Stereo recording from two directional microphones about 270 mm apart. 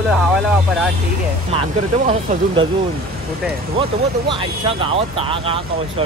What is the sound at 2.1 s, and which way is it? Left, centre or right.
Speech, right.